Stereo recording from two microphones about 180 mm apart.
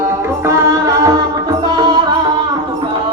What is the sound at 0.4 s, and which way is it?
Music, 15° right (ahead or behind).